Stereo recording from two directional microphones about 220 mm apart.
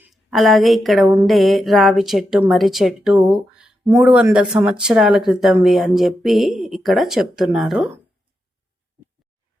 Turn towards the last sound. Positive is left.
turn(degrees=-5)  # may be behind; listen again after turning